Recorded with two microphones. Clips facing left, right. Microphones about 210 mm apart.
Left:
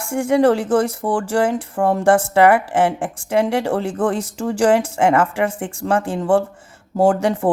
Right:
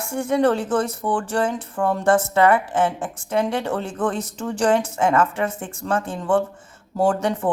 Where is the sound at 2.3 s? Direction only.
75° left (ahead or behind).